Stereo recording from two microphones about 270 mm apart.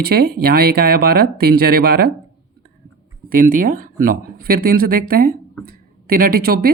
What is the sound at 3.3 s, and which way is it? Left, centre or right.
Speech, right.